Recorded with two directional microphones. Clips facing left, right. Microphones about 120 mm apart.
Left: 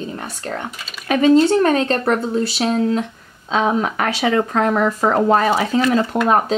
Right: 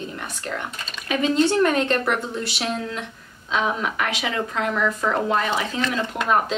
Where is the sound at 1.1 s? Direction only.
45° left (ahead or behind).